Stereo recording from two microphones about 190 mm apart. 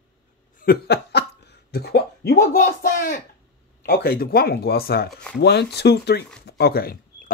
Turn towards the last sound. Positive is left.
turn(degrees=50)  # may be behind; listen again after turning